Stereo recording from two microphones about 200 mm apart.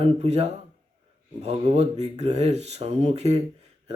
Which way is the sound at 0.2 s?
30° right (ahead or behind).